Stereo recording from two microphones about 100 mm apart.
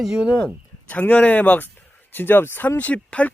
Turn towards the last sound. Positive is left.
turn(degrees=15)  # may be behind; listen again after turning